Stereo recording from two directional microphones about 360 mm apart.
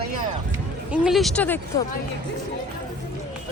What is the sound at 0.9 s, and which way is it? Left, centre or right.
Speech, centre.